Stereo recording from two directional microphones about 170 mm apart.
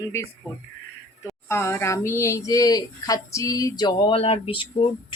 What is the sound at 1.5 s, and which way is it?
A woman's voice, 15° left (ahead or behind).